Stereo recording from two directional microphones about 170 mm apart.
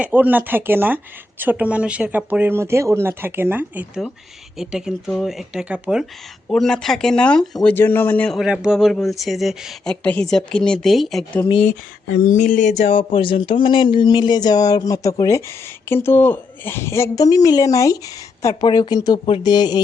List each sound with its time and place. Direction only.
0.0 s speech: 10° right (ahead or behind)
12.3 s speech: 50° left (ahead or behind); by 19.8 s 25° left (ahead or behind)